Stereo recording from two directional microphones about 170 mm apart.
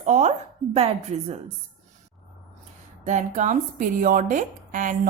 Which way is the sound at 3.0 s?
45° right (ahead or behind).